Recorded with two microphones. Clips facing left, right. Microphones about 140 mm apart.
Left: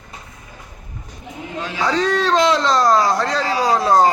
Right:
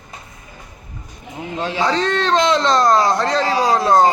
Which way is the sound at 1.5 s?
30° right (ahead or behind).